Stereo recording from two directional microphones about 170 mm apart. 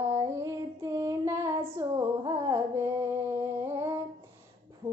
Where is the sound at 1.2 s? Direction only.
20° right (ahead or behind).